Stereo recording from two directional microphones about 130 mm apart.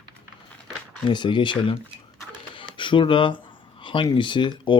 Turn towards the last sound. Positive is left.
turn(degrees=35)  # may be behind; listen again after turning